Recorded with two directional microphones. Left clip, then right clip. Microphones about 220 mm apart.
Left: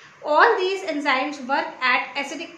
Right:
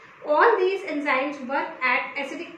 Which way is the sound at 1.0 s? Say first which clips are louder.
Left 3 dB; centre (ahead or behind).